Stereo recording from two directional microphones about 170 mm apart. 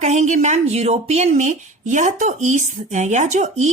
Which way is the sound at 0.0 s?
45° right (ahead or behind).